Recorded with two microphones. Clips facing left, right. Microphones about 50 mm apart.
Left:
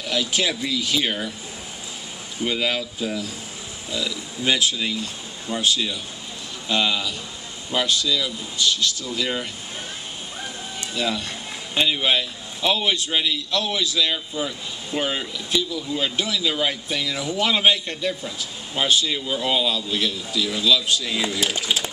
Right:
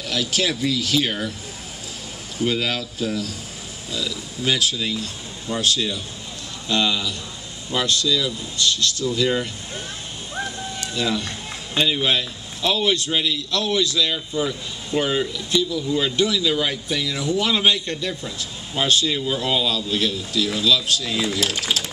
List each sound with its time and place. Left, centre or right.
0.0 s a man's voice: centre
2.4 s a man's voice: centre
11.0 s a man's voice: centre